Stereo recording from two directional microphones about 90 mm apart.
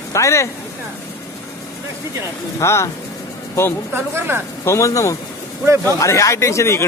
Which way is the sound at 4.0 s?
25° right (ahead or behind).